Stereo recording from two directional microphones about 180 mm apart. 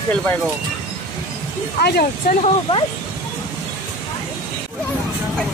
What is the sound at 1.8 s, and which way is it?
Speech, 60° left (ahead or behind).